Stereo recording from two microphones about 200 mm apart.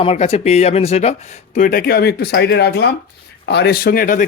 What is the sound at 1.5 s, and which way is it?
Speech, 45° left (ahead or behind).